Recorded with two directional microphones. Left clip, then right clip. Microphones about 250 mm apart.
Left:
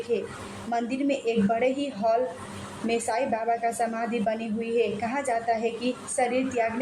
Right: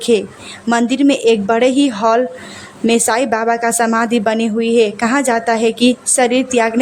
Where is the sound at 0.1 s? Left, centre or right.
Right.